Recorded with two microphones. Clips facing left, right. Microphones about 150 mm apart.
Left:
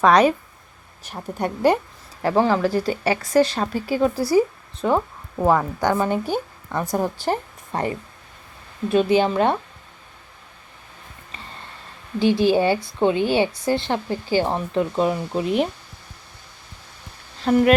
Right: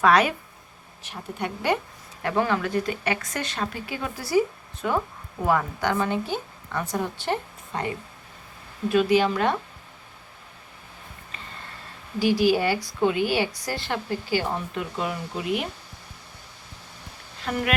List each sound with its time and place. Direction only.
0.0 s speech: 40° left (ahead or behind)
8.9 s a woman's voice: 30° left (ahead or behind)
12.2 s a woman's voice: 25° left (ahead or behind)
14.5 s speech: 30° left (ahead or behind)
17.4 s speech: 30° left (ahead or behind)